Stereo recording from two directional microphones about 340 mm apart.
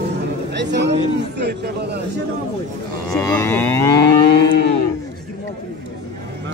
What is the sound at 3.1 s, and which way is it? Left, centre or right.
Livestock, centre.